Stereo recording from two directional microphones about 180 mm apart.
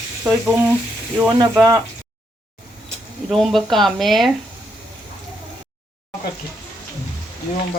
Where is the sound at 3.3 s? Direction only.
Centre (ahead or behind).